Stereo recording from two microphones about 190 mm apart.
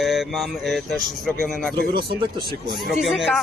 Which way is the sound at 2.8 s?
Centre (ahead or behind).